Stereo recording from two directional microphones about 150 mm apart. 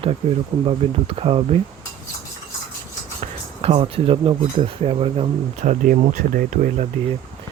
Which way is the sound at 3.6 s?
45° right (ahead or behind).